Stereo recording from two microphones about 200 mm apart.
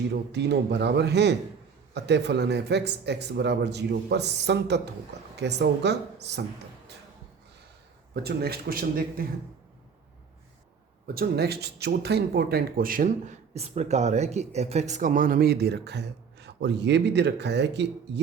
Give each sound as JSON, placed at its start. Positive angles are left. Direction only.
{"t": 0.1, "sound": "speech", "side_deg": -60}
{"t": 8.1, "sound": "speech", "side_deg": -50}
{"t": 11.0, "sound": "speech", "side_deg": -50}